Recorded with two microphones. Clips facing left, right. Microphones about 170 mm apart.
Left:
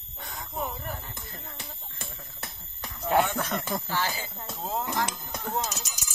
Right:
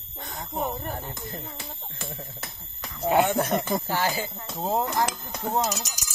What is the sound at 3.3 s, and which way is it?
Snake, 40° right (ahead or behind).